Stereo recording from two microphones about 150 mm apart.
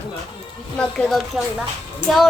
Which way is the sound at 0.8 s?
5° left (ahead or behind).